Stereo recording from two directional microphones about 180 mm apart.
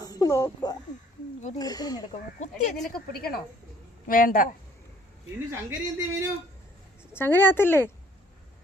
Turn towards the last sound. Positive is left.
turn(degrees=10)  # may be behind; listen again after turning